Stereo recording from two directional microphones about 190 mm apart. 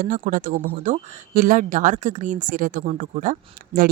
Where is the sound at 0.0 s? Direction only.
45° right (ahead or behind).